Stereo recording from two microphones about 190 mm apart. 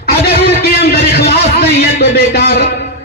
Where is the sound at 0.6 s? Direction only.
55° left (ahead or behind).